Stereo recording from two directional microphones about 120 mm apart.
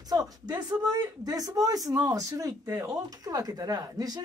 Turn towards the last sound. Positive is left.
turn(degrees=-30)  # may be behind; listen again after turning